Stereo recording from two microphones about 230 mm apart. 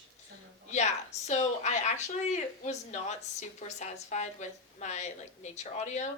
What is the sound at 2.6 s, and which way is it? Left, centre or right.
A woman's voice, left.